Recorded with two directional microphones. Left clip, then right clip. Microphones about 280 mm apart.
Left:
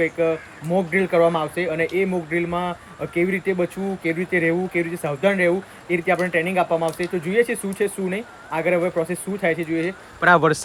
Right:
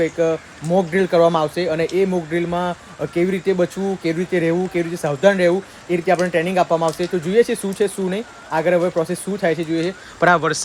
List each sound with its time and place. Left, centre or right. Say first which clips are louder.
0.0 s speech: right 2 dB; centre
10.2 s a man's voice: even; centre